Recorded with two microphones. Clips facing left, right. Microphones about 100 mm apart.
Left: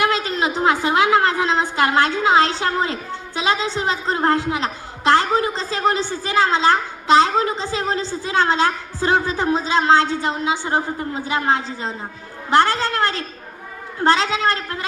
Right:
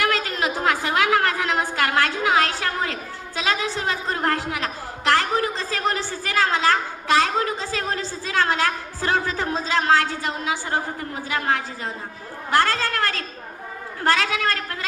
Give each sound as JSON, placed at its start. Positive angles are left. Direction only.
{"t": 0.0, "sound": "a woman's voice", "side_deg": 20}